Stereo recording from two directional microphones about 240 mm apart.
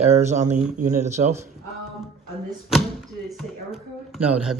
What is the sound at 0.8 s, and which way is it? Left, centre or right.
Speech, right.